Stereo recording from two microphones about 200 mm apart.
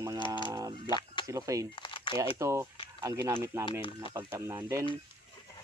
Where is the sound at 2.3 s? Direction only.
15° right (ahead or behind).